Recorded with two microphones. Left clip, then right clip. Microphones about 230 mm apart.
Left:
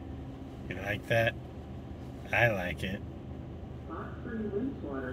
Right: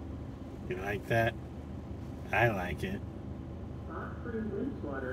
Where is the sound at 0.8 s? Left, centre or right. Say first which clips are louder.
Left 2 dB; left.